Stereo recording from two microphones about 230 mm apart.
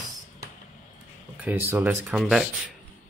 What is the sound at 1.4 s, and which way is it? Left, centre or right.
Speech, centre.